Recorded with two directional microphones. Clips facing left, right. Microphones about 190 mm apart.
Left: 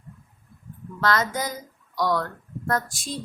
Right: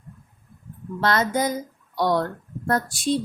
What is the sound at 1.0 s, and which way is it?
Speech, 25° right (ahead or behind).